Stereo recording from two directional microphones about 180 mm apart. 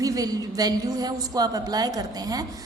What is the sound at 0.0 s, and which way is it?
A woman's voice, 20° right (ahead or behind).